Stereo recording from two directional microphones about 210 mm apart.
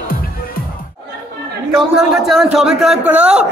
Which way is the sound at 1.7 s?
Centre (ahead or behind).